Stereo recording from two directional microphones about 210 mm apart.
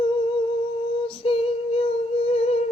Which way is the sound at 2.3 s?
30° left (ahead or behind).